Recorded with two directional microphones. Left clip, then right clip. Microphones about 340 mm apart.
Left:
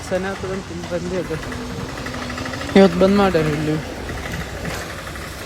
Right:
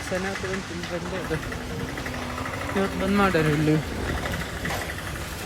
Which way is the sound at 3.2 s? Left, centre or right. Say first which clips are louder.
Left 4 dB; centre.